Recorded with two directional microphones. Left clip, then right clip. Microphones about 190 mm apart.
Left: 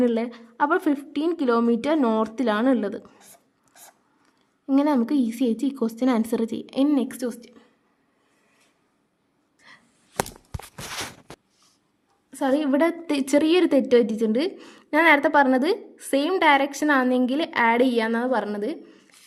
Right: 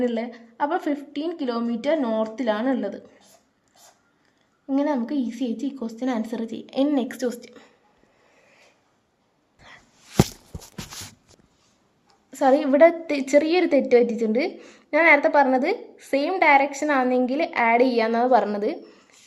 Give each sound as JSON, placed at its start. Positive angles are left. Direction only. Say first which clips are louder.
{"t": 0.0, "sound": "a woman's voice", "louder": "left 2 dB", "side_deg": 30}
{"t": 4.6, "sound": "a woman's voice", "louder": "left 2 dB", "side_deg": 35}
{"t": 12.3, "sound": "a woman's voice", "louder": "right 4 dB", "side_deg": 15}